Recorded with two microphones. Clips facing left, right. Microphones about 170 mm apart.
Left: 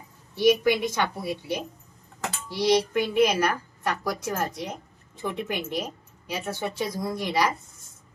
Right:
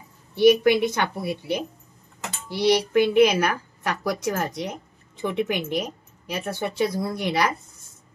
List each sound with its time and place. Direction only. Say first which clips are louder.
0.4 s a woman's voice: right 4 dB; 60° right (ahead or behind)